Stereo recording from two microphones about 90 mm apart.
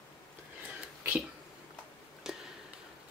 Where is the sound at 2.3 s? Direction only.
5° right (ahead or behind).